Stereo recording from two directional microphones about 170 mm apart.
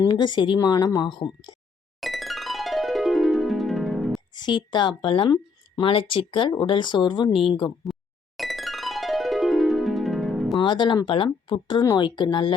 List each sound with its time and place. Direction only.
0.0 s a woman's voice: 25° left (ahead or behind)
2.0 s music: centre (ahead or behind)
4.4 s a woman's voice: 25° left (ahead or behind)
8.4 s music: centre (ahead or behind)
10.6 s a woman's voice: 25° left (ahead or behind)